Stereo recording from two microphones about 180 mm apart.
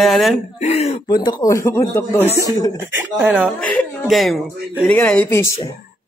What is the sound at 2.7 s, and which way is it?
Speech, 10° right (ahead or behind).